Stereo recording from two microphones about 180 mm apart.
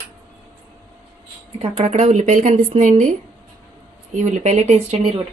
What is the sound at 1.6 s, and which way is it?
A woman's voice, 40° right (ahead or behind).